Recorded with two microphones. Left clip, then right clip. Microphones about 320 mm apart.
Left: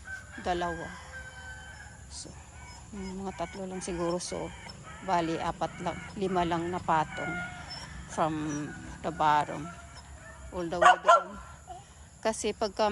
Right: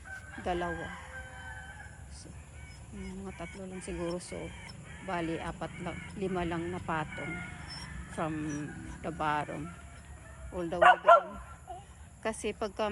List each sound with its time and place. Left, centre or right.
0.4 s speech: centre
3.0 s speech: centre
3.5 s speech: left
5.4 s speech: centre
7.1 s speech: left
8.1 s speech: centre
12.2 s speech: centre